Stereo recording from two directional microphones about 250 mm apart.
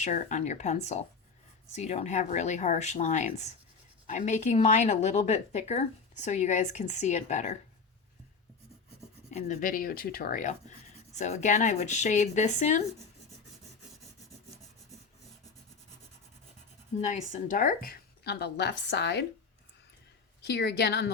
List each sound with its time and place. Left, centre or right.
0.0 s speech: left
9.3 s speech: left
17.0 s speech: left
20.4 s speech: left